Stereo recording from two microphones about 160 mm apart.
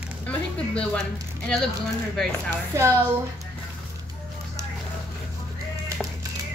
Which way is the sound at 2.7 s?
15° right (ahead or behind).